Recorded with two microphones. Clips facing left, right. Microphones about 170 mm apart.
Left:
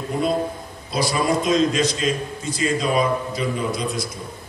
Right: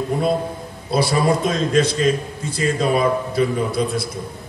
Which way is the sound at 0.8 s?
60° right (ahead or behind).